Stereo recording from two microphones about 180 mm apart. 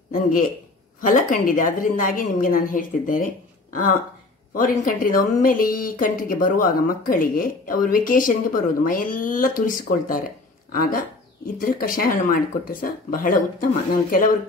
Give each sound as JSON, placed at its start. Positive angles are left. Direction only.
{"t": 0.1, "sound": "a man's voice", "side_deg": 50}
{"t": 4.6, "sound": "speech", "side_deg": 50}